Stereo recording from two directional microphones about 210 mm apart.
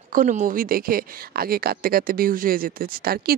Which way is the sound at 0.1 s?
40° right (ahead or behind).